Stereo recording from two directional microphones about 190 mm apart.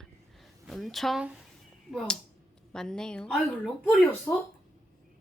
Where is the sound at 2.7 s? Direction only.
5° left (ahead or behind).